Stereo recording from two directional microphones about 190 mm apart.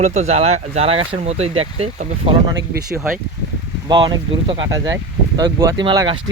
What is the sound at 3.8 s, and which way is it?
Speech, 25° right (ahead or behind).